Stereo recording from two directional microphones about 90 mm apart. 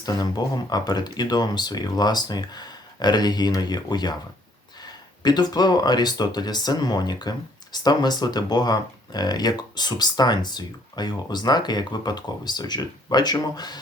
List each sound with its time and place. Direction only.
0.0 s speech: 50° left (ahead or behind)